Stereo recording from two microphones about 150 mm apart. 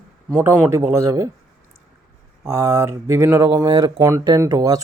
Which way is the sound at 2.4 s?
20° right (ahead or behind).